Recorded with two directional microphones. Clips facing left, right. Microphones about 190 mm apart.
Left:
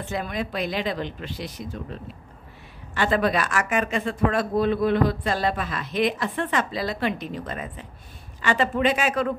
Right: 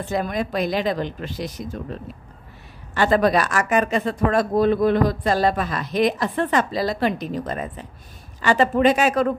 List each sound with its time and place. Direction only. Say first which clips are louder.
0.0 s speech: right 5 dB; 40° right (ahead or behind)
2.9 s speech: right 4 dB; 40° right (ahead or behind)